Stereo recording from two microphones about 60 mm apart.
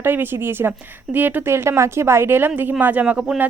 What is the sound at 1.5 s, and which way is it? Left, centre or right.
A woman's voice, right.